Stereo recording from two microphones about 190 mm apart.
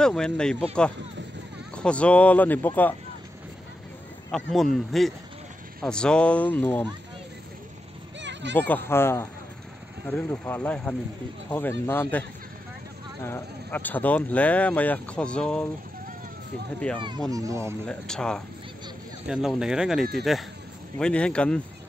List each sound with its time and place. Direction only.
0.0 s speech: 5° left (ahead or behind)
1.8 s speech: 5° left (ahead or behind)
4.3 s speech: centre (ahead or behind)
8.2 s a sound: 70° right (ahead or behind)
8.5 s speech: 10° left (ahead or behind)
16.8 s speech: 5° left (ahead or behind)
17.3 s speech: 15° right (ahead or behind)
17.8 s speech: 5° left (ahead or behind)